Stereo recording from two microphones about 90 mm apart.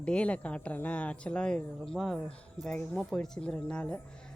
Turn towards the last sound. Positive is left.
turn(degrees=10)  # may be behind; listen again after turning